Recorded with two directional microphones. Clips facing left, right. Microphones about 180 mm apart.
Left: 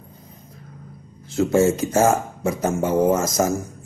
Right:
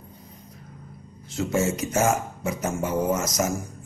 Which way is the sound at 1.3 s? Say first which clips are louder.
Left 7 dB; 30° left (ahead or behind).